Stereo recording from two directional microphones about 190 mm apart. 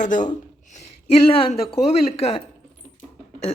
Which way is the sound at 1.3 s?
30° left (ahead or behind).